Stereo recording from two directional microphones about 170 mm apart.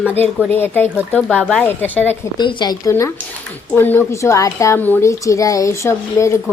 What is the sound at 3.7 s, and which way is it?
A woman's voice, 10° left (ahead or behind).